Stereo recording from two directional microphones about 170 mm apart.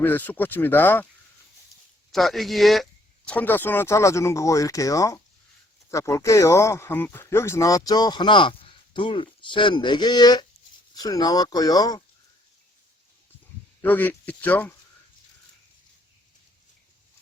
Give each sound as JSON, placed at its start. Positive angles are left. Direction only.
{"t": 0.0, "sound": "speech", "side_deg": 10}
{"t": 2.1, "sound": "speech", "side_deg": 0}
{"t": 13.8, "sound": "speech", "side_deg": 10}